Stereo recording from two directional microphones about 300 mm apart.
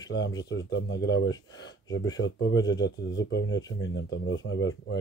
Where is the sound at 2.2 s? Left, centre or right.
Left.